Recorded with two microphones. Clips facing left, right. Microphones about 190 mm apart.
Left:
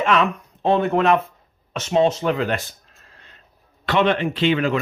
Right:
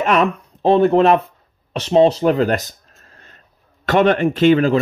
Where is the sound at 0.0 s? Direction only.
40° right (ahead or behind).